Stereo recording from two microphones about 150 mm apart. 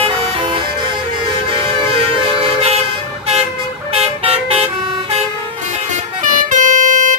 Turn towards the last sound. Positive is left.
turn(degrees=-60)  # may be behind; listen again after turning